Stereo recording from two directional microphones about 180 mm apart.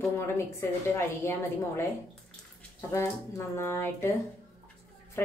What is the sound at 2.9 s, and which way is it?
A woman's voice, 15° left (ahead or behind).